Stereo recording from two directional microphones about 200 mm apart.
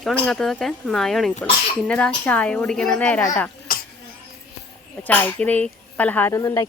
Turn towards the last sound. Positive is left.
turn(degrees=15)  # may be behind; listen again after turning